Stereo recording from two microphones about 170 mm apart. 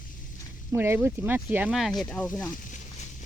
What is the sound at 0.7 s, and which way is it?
Speech, 15° right (ahead or behind).